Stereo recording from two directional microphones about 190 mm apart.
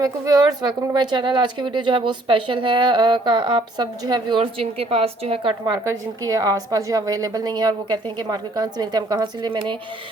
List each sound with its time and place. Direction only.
0.0 s speech: 20° right (ahead or behind)